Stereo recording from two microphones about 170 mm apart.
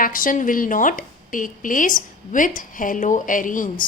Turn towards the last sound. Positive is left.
turn(degrees=50)  # may be behind; listen again after turning